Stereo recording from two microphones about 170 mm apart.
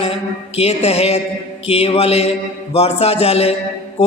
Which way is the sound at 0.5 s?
40° left (ahead or behind).